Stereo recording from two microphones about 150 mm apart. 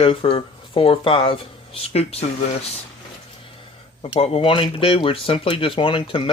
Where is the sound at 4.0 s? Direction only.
40° left (ahead or behind).